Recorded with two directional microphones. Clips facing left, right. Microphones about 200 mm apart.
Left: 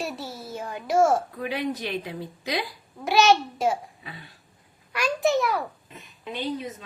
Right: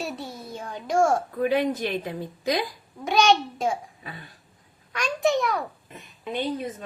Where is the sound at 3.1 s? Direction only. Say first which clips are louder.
Left 1 dB; 5° left (ahead or behind).